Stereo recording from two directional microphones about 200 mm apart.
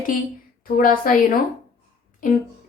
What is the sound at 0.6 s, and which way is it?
Speech, 45° left (ahead or behind).